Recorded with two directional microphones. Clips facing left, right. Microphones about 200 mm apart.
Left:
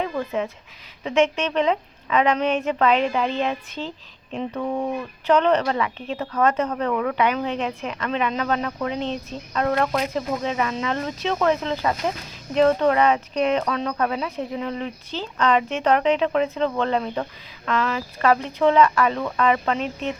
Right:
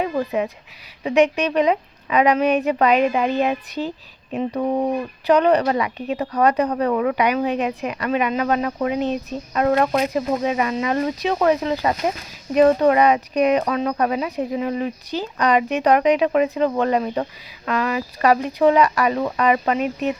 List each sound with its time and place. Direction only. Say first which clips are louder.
0.3 s speech: right 3 dB; 15° right (ahead or behind)
4.6 s speech: right 5 dB; 35° right (ahead or behind)
5.2 s speech: right 3 dB; 15° right (ahead or behind)